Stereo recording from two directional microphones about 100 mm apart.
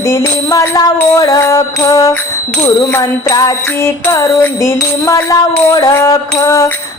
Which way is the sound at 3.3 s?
35° left (ahead or behind).